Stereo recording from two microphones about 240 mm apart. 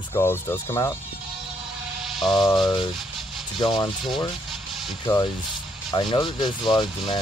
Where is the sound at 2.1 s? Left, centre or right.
Centre.